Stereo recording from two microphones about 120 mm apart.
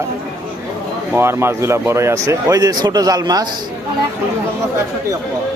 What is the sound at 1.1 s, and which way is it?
Speech, 20° right (ahead or behind).